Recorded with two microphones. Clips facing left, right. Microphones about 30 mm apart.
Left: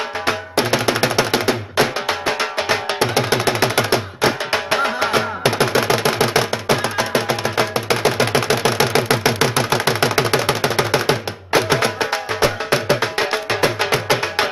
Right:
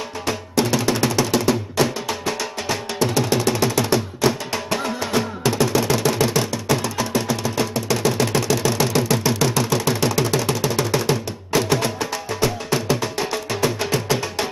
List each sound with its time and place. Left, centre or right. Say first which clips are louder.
0.3 s music: left 2 dB; left